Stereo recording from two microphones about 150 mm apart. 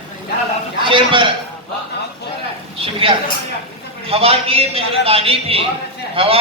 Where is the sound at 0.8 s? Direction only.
35° right (ahead or behind).